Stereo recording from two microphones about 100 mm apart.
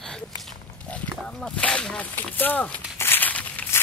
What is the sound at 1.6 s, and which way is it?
Speech, 10° left (ahead or behind).